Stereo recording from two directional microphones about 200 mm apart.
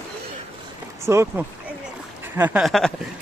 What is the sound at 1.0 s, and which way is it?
Speech, 15° right (ahead or behind).